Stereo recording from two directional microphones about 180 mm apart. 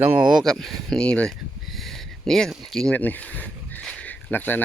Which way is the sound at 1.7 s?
Centre (ahead or behind).